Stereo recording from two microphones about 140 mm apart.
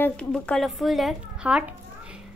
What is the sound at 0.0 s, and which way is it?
A child's voice, 5° left (ahead or behind).